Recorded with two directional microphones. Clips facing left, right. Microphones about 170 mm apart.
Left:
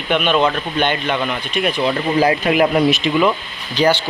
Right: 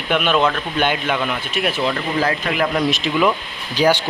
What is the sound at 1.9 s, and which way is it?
Speech, 15° left (ahead or behind).